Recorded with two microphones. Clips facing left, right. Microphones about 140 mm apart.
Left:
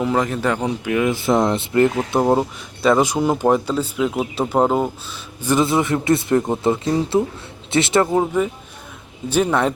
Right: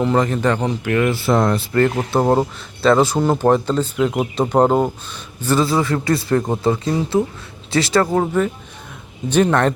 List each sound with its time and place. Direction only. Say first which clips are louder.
0.0 s speech: right 2 dB; 5° left (ahead or behind); by 1.9 s 20° left (ahead or behind)
2.2 s speech: right 1 dB; centre (ahead or behind)
2.8 s speech: right 2 dB; 15° left (ahead or behind)
5.4 s a man's voice: even; 15° left (ahead or behind)
8.1 s speech: right 1 dB; 10° left (ahead or behind)